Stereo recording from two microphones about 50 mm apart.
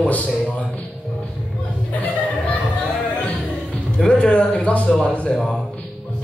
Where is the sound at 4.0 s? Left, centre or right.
Left.